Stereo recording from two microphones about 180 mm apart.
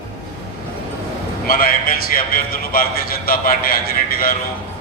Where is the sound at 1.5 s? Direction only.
55° left (ahead or behind).